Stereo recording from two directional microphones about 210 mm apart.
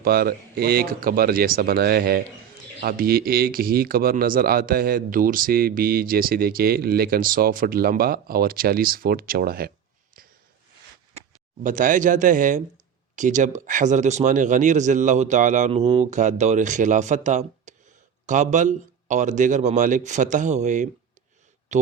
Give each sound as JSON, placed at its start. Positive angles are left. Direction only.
{"t": 0.0, "sound": "speech", "side_deg": -45}
{"t": 11.6, "sound": "speech", "side_deg": -40}
{"t": 21.7, "sound": "a sound", "side_deg": -35}